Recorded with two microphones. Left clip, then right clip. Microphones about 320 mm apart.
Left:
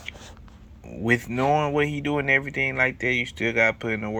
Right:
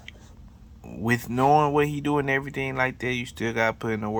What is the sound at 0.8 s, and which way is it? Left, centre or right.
Speech, right.